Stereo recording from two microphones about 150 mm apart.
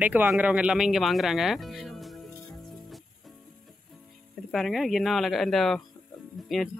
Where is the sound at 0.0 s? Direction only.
10° right (ahead or behind).